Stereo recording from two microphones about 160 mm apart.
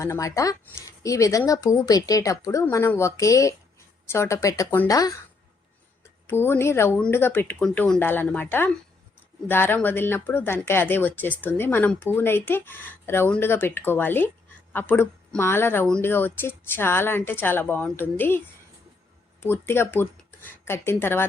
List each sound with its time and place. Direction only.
0.0 s speech: 20° left (ahead or behind)
6.2 s speech: 15° left (ahead or behind)